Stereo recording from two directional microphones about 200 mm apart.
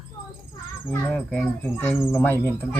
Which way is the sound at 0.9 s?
5° left (ahead or behind).